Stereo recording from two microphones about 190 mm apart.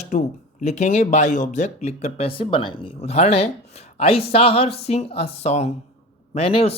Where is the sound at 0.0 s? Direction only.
35° left (ahead or behind).